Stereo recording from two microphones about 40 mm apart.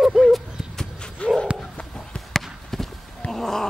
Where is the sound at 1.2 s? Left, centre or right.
Left.